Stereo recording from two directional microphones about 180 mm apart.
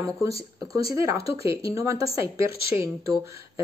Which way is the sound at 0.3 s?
35° left (ahead or behind).